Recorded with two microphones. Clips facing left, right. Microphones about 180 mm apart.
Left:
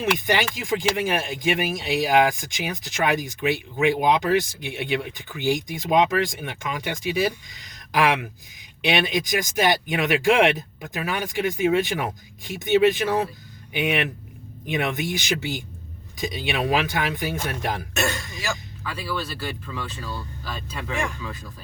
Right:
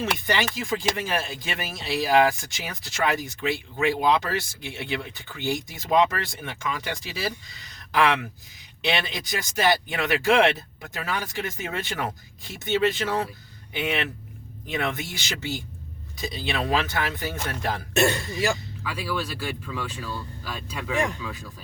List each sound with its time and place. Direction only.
0.0 s speech: 15° left (ahead or behind)
17.9 s speech: 30° right (ahead or behind)
18.8 s speech: 10° right (ahead or behind)